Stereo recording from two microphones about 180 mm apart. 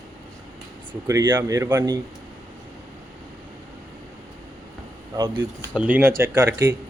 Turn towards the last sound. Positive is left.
turn(degrees=-15)  # may be behind; listen again after turning